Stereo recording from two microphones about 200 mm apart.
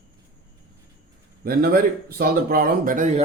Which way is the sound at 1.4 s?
50° right (ahead or behind).